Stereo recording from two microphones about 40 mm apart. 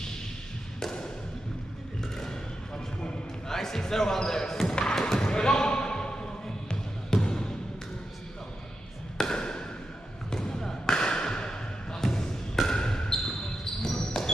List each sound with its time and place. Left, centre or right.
3.0 s basketball bounce: centre
9.2 s a sound: centre
12.6 s basketball bounce: centre